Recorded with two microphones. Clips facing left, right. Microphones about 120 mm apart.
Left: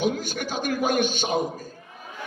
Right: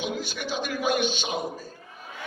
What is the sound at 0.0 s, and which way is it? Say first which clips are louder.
A man's voice: left 5 dB; 45° left (ahead or behind).